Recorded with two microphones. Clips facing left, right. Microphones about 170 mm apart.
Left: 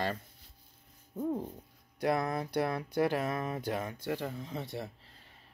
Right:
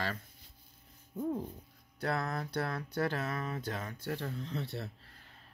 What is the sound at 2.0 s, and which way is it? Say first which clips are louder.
Speech: left 4 dB; 15° left (ahead or behind).